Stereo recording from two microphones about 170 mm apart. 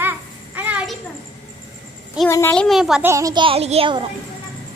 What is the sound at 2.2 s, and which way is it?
Speech, 5° right (ahead or behind).